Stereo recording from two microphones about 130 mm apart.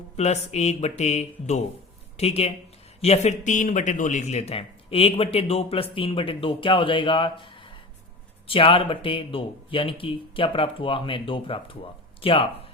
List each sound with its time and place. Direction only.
0.2 s a man's voice: 60° left (ahead or behind)